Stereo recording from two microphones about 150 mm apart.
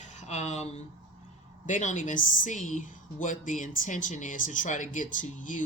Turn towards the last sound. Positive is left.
turn(degrees=60)  # may be behind; listen again after turning